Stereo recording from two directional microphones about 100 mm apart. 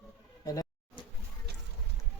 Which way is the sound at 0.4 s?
35° left (ahead or behind).